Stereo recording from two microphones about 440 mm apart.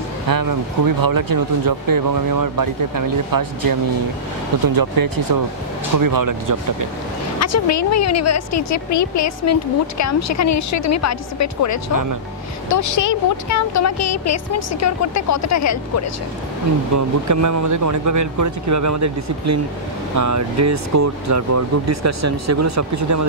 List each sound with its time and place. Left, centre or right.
0.3 s speech: right
7.3 s a woman's voice: left
11.9 s speech: right
12.6 s a woman's voice: left
16.9 s speech: right